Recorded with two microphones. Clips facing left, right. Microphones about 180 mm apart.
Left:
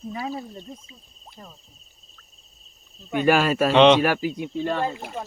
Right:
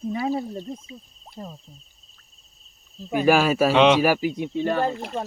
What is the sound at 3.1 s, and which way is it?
Speech, 5° right (ahead or behind).